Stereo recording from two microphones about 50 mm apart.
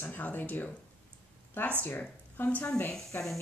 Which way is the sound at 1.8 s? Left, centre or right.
Left.